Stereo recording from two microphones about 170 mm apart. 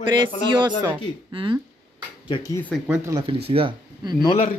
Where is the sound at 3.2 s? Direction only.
35° right (ahead or behind).